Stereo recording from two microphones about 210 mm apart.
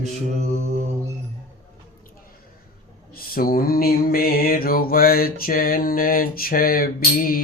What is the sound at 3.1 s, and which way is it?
Mantra, 45° left (ahead or behind).